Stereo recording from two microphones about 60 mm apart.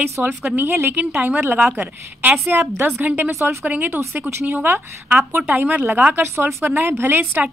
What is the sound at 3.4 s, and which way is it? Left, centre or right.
Speech, right.